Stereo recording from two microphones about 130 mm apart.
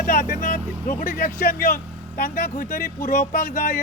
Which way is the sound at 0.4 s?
90° left.